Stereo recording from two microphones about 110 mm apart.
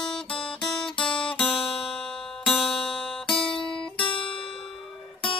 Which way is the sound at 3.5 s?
50° left (ahead or behind).